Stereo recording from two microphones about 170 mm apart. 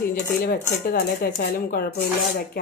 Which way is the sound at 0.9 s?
55° left (ahead or behind).